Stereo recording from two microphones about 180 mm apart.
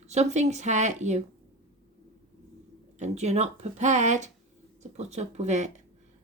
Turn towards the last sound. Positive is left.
turn(degrees=-40)  # may be behind; listen again after turning